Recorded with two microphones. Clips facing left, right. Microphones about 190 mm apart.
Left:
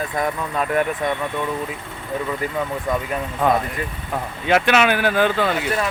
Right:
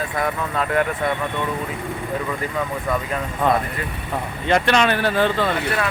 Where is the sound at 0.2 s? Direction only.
15° left (ahead or behind).